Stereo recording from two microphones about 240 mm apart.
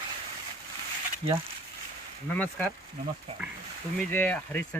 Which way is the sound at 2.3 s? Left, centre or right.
Centre.